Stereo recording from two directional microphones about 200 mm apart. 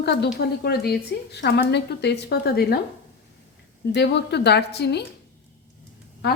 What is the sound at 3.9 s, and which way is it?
A woman's voice, 55° left (ahead or behind).